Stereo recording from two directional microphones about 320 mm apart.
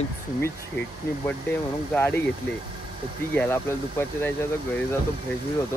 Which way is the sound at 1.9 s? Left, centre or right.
Centre.